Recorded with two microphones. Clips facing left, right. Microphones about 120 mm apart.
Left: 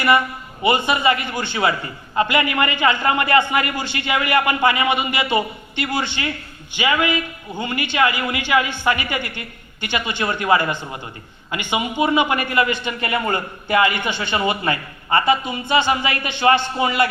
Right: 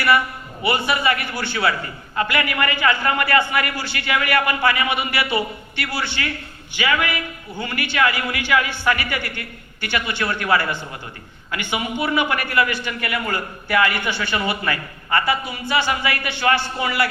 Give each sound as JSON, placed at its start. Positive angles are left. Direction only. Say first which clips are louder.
{"t": 0.6, "sound": "a man's voice", "louder": "left 3 dB", "side_deg": 20}